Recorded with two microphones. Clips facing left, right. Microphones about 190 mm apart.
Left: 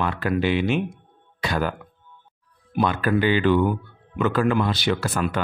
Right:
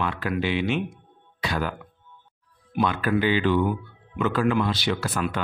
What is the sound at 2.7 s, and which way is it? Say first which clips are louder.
Speech: left 2 dB; 45° left (ahead or behind).